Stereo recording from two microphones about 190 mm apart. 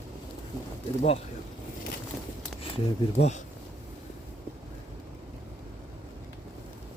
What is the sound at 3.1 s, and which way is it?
Speech, 35° left (ahead or behind).